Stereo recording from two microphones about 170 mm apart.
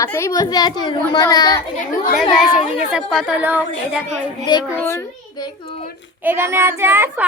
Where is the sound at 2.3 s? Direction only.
5° right (ahead or behind).